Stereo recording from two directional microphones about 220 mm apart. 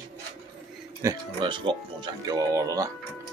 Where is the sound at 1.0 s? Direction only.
15° right (ahead or behind).